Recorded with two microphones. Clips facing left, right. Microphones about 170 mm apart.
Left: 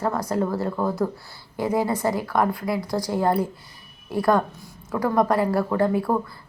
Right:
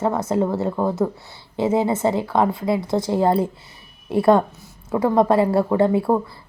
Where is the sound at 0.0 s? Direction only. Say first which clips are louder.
Right 4 dB; 25° right (ahead or behind).